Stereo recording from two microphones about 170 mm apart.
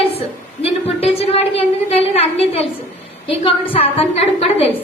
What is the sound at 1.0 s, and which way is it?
A woman's voice, 35° left (ahead or behind).